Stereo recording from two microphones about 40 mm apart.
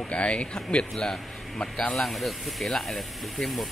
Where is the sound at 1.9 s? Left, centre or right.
Centre.